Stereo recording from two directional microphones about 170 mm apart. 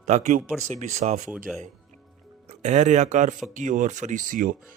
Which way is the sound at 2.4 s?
45° right (ahead or behind).